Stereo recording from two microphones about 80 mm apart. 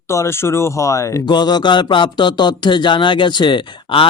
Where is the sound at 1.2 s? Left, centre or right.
Left.